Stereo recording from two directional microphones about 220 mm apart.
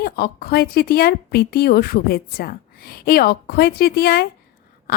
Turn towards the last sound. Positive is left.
turn(degrees=45)  # may be behind; listen again after turning